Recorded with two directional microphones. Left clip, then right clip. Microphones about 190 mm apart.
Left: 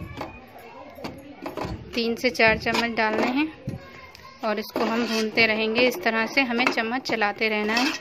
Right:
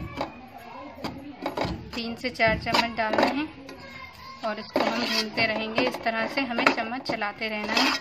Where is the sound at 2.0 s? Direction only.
50° left (ahead or behind).